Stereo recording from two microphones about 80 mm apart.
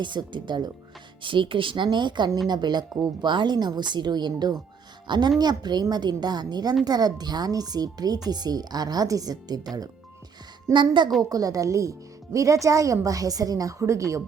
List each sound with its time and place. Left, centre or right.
0.0 s speech: right
1.2 s a woman's voice: right
10.7 s speech: right
11.2 s speech: right